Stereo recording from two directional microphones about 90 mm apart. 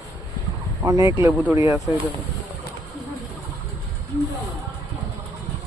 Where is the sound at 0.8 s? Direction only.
35° right (ahead or behind).